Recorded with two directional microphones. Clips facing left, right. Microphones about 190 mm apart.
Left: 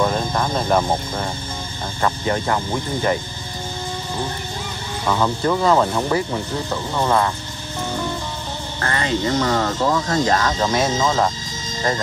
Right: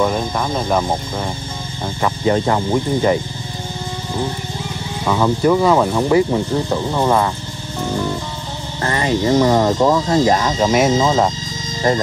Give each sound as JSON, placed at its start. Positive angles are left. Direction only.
{"t": 0.0, "sound": "speech", "side_deg": -5}
{"t": 2.2, "sound": "speech", "side_deg": -20}
{"t": 5.0, "sound": "speech", "side_deg": -5}
{"t": 8.8, "sound": "speech", "side_deg": -20}